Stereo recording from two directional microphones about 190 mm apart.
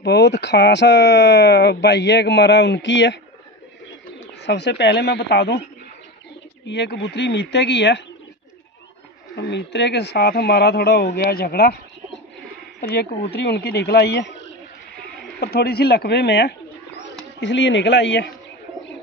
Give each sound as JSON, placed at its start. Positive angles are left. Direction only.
{"t": 0.0, "sound": "speech", "side_deg": 65}
{"t": 4.4, "sound": "speech", "side_deg": 65}
{"t": 6.6, "sound": "speech", "side_deg": 65}
{"t": 9.4, "sound": "speech", "side_deg": 65}
{"t": 12.8, "sound": "speech", "side_deg": 55}
{"t": 15.3, "sound": "speech", "side_deg": 55}